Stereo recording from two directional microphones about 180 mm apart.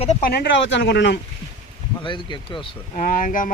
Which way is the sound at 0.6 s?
90° left.